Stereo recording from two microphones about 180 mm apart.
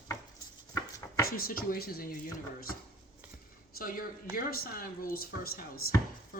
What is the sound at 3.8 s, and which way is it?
A woman's voice, 50° left (ahead or behind).